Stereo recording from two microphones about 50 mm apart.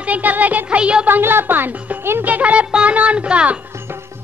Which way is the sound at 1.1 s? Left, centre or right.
Right.